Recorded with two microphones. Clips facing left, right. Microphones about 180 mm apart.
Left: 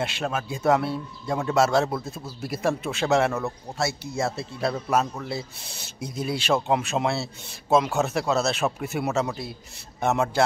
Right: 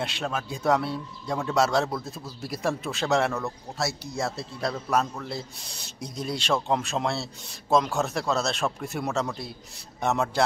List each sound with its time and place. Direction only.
0.0 s speech: centre (ahead or behind)